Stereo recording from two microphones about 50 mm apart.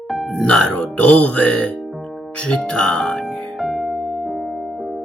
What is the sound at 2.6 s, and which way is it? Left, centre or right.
Speech, centre.